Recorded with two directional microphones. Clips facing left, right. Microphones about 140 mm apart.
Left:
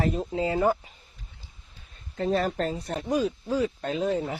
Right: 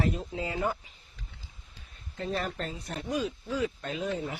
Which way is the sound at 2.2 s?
35° left (ahead or behind).